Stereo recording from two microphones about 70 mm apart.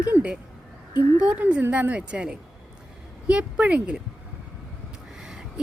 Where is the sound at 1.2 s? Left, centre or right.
Centre.